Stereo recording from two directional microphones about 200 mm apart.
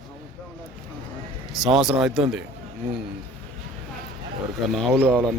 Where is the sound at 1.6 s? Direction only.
Centre (ahead or behind).